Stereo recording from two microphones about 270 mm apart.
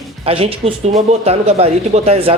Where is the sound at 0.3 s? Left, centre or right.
Right.